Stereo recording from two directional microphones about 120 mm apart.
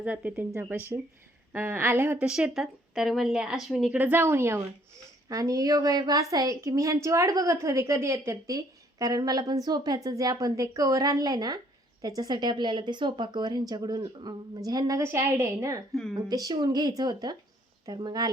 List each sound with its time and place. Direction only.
0.0 s a woman's voice: 10° right (ahead or behind)
2.1 s a woman's voice: 10° right (ahead or behind); by 18.3 s 35° right (ahead or behind)